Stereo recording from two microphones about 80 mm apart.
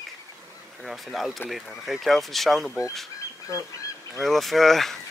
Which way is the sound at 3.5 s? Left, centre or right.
Left.